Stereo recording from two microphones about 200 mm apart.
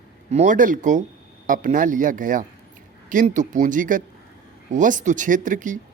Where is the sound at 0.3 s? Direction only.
35° right (ahead or behind).